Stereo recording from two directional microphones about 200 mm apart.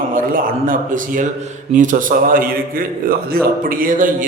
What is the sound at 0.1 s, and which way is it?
A man's voice, 45° right (ahead or behind).